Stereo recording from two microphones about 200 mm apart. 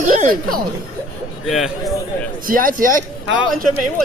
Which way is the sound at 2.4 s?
45° right (ahead or behind).